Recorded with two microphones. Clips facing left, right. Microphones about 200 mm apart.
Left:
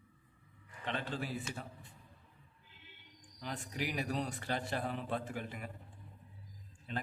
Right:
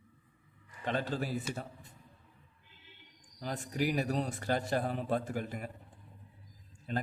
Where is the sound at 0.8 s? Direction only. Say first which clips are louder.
Right 5 dB; 40° right (ahead or behind).